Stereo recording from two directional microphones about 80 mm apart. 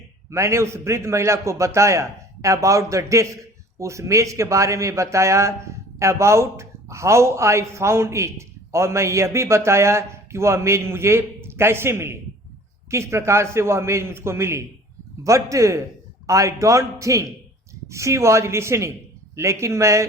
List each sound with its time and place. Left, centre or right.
0.3 s a man's voice: right